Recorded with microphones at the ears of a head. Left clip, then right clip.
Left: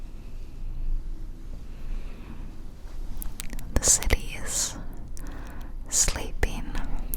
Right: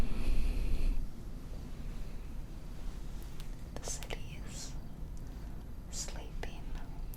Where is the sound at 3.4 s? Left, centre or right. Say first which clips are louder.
Left 18 dB; left.